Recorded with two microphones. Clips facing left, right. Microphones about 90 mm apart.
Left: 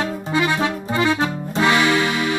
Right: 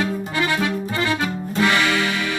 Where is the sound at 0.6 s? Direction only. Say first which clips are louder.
Left 3 dB; 25° left (ahead or behind).